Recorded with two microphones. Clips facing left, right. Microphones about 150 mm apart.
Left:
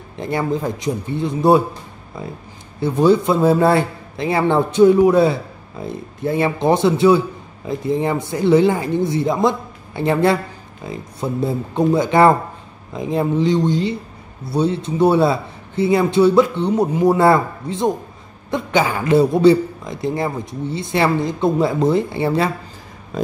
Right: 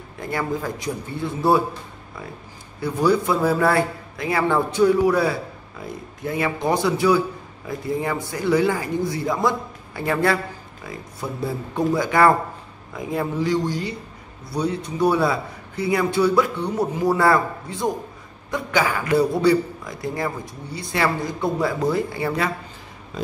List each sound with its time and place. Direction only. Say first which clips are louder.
0.2 s speech: left 5 dB; 25° left (ahead or behind)
2.8 s speech: left 5 dB; 25° left (ahead or behind)
23.1 s speech: left 6 dB; 45° left (ahead or behind)